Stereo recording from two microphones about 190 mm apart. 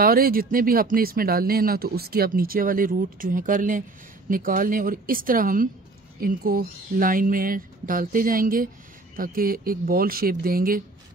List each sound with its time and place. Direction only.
0.0 s speech: 50° right (ahead or behind)